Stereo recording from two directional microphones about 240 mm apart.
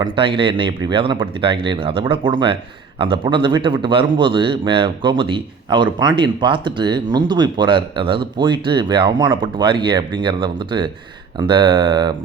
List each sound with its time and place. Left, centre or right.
0.0 s a man's voice: right